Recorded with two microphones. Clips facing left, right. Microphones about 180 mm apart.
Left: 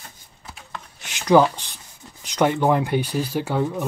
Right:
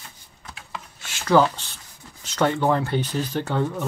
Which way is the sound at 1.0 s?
15° left (ahead or behind).